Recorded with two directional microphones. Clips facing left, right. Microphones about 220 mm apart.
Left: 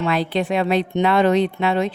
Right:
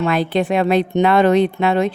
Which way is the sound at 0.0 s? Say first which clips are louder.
Right 3 dB; 50° right (ahead or behind).